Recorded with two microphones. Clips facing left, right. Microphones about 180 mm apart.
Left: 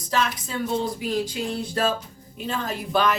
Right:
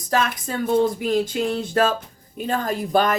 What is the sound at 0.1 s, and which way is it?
Speech, 50° right (ahead or behind).